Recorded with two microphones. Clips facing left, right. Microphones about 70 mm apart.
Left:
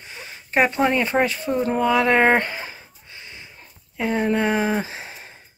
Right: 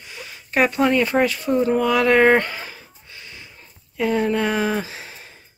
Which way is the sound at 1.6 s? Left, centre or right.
Left.